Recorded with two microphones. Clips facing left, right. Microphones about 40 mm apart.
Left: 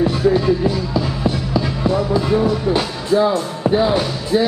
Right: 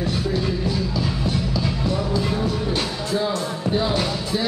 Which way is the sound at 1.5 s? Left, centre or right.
Left.